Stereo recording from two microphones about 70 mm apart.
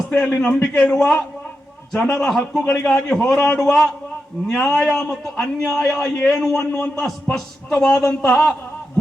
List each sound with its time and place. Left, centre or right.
0.1 s a man's voice: centre